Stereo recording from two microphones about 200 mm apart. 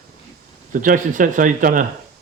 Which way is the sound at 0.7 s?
40° right (ahead or behind).